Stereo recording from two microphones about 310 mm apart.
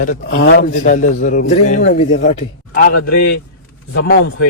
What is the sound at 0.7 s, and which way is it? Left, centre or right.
A man's voice, left.